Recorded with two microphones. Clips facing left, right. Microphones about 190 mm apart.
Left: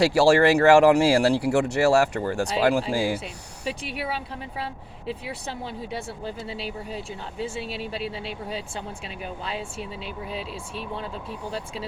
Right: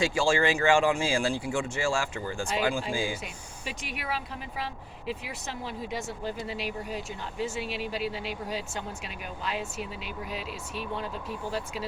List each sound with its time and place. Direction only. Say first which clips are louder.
0.0 s speech: left 8 dB; 70° left (ahead or behind)
3.7 s speech: left 5 dB; 30° left (ahead or behind)